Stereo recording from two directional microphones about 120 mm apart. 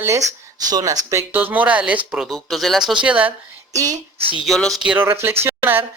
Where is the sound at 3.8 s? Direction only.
30° right (ahead or behind).